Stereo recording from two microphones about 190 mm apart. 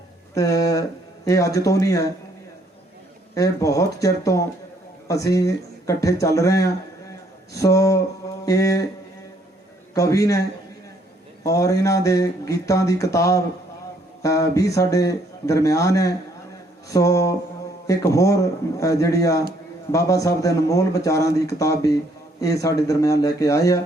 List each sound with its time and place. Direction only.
0.3 s speech: 15° left (ahead or behind)
3.3 s speech: 15° left (ahead or behind)
9.9 s speech: 15° left (ahead or behind)
11.4 s speech: 15° left (ahead or behind)